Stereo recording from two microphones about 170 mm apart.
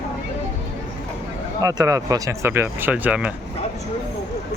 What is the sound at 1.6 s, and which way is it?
Speech, 20° right (ahead or behind).